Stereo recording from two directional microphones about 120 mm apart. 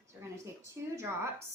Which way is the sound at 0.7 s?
20° right (ahead or behind).